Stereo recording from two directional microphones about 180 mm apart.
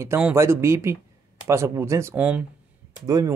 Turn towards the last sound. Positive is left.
turn(degrees=-20)  # may be behind; listen again after turning